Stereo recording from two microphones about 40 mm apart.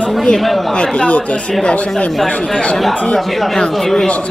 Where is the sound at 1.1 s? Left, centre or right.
Left.